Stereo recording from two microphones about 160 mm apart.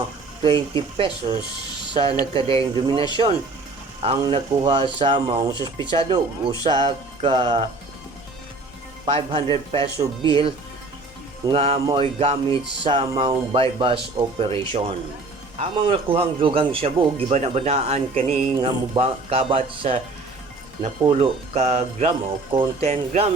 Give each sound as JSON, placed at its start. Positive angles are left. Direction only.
{"t": 0.4, "sound": "speech", "side_deg": -30}
{"t": 9.0, "sound": "speech", "side_deg": -35}
{"t": 21.0, "sound": "speech", "side_deg": -35}